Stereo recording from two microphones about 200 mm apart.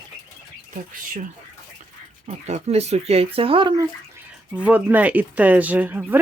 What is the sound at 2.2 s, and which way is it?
Speech, 30° right (ahead or behind).